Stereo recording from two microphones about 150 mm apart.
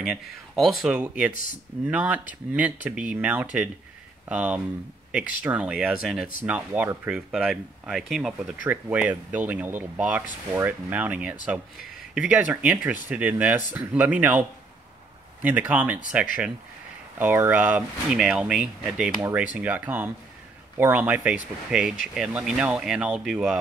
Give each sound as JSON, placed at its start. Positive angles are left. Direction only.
{"t": 0.0, "sound": "speech", "side_deg": -5}
{"t": 1.3, "sound": "speech", "side_deg": 65}
{"t": 1.9, "sound": "speech", "side_deg": -10}
{"t": 15.4, "sound": "speech", "side_deg": -10}